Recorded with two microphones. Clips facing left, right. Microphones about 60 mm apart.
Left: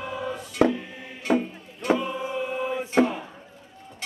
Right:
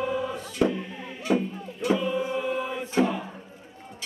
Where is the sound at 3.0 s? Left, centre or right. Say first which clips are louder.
Left 2 dB; left.